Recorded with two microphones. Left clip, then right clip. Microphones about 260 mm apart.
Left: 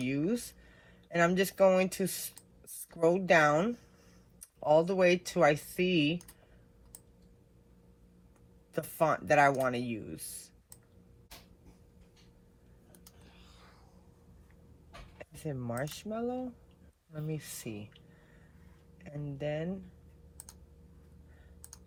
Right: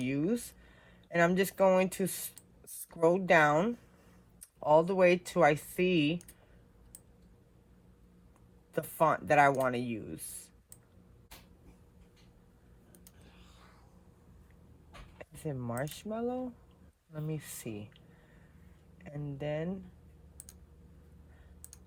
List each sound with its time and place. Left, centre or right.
0.0 s a sound: right
1.1 s speech: right
8.7 s speech: right
15.2 s speech: right
19.0 s speech: right